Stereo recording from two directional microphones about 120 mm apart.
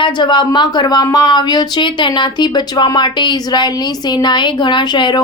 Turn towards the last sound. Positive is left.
turn(degrees=40)  # may be behind; listen again after turning